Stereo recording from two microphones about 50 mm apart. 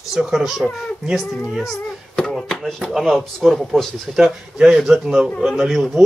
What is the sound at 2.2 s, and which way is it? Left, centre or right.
Speech, centre.